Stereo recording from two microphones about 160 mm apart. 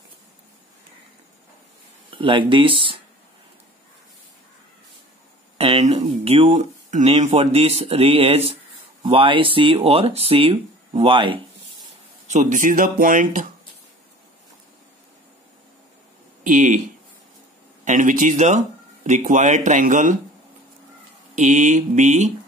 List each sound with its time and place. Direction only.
2.0 s speech: 30° right (ahead or behind)
5.6 s speech: 40° right (ahead or behind)
12.3 s speech: 50° right (ahead or behind)
16.4 s speech: 50° right (ahead or behind)
17.8 s speech: 55° right (ahead or behind)
21.4 s speech: 50° right (ahead or behind)